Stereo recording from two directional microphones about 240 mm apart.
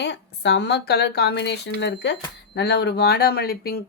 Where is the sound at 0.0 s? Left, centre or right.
Left.